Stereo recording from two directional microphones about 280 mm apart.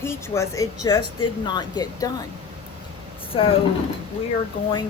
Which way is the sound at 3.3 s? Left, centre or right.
Centre.